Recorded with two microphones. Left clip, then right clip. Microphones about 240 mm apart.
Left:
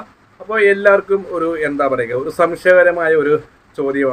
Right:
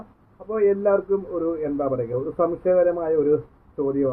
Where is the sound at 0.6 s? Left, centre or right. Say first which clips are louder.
Left 8 dB; left.